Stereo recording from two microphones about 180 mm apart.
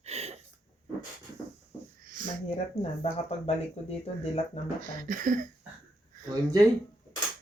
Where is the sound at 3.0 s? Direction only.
35° left (ahead or behind).